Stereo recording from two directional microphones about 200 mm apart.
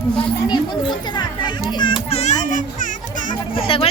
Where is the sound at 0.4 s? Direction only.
20° left (ahead or behind).